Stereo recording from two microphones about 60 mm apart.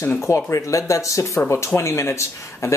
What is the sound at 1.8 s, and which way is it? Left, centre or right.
Cutlery, left.